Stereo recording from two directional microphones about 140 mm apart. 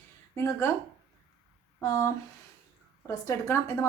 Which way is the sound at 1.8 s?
20° left (ahead or behind).